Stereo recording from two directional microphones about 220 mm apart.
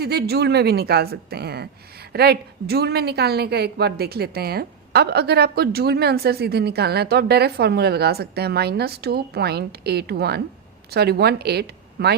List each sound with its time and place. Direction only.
0.0 s a woman's voice: 45° right (ahead or behind)